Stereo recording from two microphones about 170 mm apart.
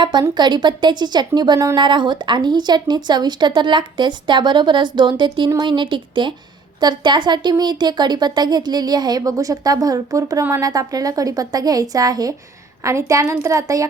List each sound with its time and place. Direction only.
0.0 s speech: 25° right (ahead or behind)